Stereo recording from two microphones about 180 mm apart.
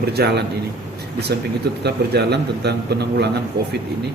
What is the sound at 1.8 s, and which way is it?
Speech, 65° right (ahead or behind).